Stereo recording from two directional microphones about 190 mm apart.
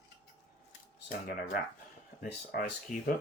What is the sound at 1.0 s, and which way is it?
Speech, 65° left (ahead or behind).